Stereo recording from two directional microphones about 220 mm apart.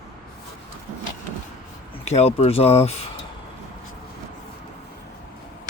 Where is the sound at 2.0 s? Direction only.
30° left (ahead or behind).